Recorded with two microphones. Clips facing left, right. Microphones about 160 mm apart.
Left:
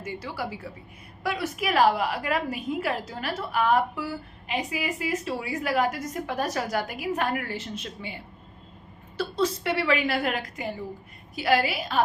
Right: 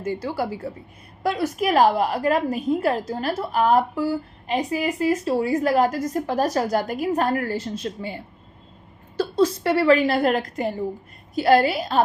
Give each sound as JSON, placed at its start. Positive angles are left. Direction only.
{"t": 0.0, "sound": "a woman's voice", "side_deg": -40}
{"t": 9.4, "sound": "a woman's voice", "side_deg": -40}